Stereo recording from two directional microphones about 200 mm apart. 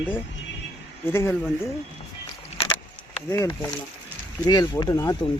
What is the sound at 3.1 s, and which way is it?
Speech, 15° left (ahead or behind).